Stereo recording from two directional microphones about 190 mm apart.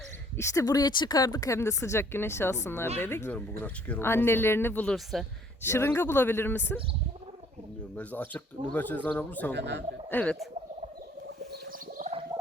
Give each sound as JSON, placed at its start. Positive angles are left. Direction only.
{"t": 0.3, "sound": "a woman's voice", "side_deg": 20}
{"t": 5.6, "sound": "a woman's voice", "side_deg": 10}
{"t": 7.9, "sound": "a woman's voice", "side_deg": 10}
{"t": 9.6, "sound": "speech", "side_deg": -65}
{"t": 10.1, "sound": "a woman's voice", "side_deg": 5}